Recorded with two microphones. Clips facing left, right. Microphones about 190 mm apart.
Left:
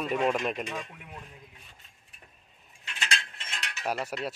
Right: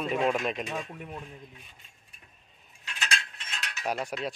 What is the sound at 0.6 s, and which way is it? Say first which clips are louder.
Speech: right 2 dB; 35° right (ahead or behind).